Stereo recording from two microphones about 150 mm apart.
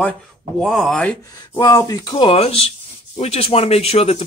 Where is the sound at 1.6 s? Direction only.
25° left (ahead or behind).